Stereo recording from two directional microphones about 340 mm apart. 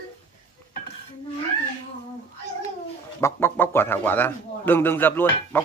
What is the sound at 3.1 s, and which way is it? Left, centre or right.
Speech, centre.